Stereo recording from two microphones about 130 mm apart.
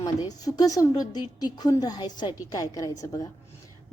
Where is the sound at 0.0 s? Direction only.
30° left (ahead or behind).